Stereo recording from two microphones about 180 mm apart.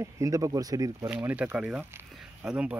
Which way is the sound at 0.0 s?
20° right (ahead or behind).